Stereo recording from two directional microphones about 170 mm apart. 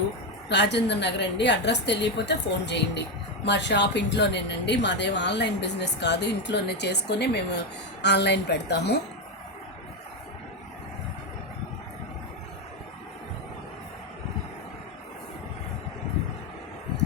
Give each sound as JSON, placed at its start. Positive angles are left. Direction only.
{"t": 0.4, "sound": "a woman's voice", "side_deg": 90}